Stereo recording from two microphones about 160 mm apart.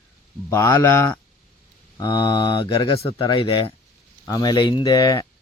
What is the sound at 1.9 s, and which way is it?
Speech, 25° left (ahead or behind).